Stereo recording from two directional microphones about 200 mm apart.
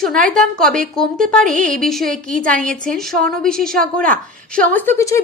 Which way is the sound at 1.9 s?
Centre (ahead or behind).